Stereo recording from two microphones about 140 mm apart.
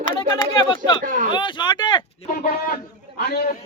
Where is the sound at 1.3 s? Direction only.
35° left (ahead or behind).